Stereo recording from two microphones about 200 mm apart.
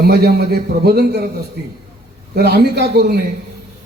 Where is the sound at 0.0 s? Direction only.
55° right (ahead or behind).